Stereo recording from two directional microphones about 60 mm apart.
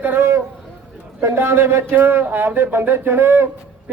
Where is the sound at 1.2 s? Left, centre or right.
Right.